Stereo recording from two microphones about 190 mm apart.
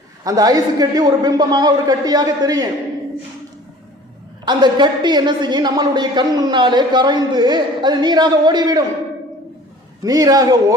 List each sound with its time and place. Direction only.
0.3 s a woman's voice: 20° right (ahead or behind)
4.4 s a woman's voice: 25° right (ahead or behind)
10.0 s a woman's voice: 20° right (ahead or behind)